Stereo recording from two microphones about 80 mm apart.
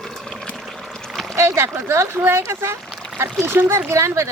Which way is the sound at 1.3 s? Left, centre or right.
Right.